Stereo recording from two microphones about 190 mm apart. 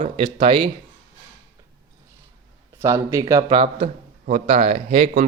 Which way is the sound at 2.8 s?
15° right (ahead or behind).